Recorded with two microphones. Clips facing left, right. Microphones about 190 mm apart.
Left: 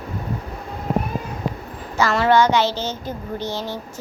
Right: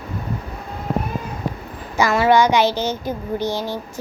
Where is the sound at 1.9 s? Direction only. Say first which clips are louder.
Right 1 dB; 10° right (ahead or behind).